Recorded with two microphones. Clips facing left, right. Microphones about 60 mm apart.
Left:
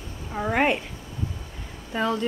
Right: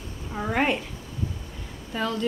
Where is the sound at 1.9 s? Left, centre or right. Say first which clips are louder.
Left 3 dB; centre.